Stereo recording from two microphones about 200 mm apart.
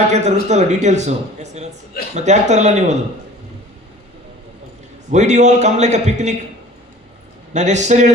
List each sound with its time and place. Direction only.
0.1 s speech: 35° right (ahead or behind)
5.1 s speech: 35° right (ahead or behind)
7.5 s speech: 35° right (ahead or behind)